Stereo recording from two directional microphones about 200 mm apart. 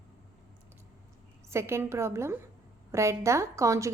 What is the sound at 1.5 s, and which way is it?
A woman's voice, 15° right (ahead or behind).